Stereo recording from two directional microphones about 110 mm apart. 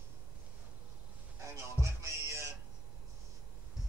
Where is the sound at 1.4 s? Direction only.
30° right (ahead or behind).